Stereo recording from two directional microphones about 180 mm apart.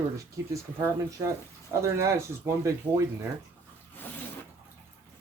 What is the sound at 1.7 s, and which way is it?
Speech, 15° right (ahead or behind).